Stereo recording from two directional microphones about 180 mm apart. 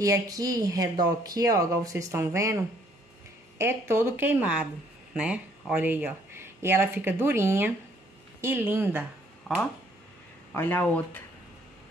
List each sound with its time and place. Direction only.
0.0 s a woman's voice: 20° right (ahead or behind)
10.5 s speech: 10° left (ahead or behind)